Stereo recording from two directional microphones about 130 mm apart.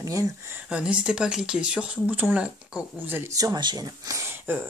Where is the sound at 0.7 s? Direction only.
10° right (ahead or behind).